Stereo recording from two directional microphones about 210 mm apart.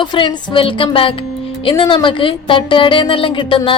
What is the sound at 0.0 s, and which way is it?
A woman's voice, 20° left (ahead or behind).